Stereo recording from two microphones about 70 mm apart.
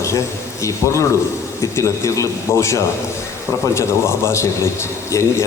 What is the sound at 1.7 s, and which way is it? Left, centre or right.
A man's voice, left.